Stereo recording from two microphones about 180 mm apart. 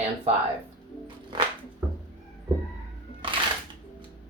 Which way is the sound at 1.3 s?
25° right (ahead or behind).